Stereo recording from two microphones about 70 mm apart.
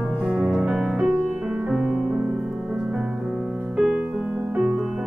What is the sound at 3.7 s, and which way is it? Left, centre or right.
Music, centre.